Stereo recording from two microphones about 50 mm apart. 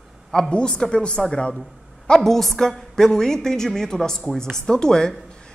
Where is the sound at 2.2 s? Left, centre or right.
Centre.